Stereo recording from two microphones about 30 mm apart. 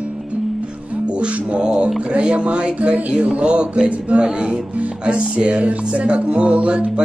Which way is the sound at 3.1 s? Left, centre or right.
Right.